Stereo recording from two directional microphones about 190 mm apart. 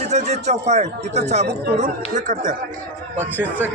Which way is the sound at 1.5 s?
60° right (ahead or behind).